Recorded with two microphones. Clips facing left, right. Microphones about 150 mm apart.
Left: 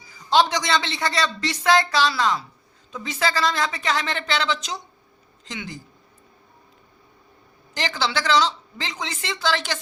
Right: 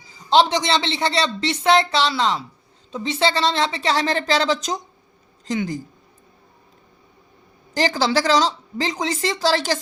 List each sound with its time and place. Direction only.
0.3 s a man's voice: 25° right (ahead or behind); by 5.8 s 40° right (ahead or behind)
7.7 s speech: 40° right (ahead or behind)